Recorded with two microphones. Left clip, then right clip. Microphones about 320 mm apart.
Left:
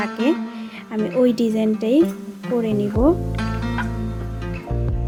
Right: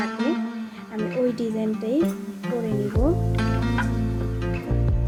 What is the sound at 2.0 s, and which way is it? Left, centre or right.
Speech, centre.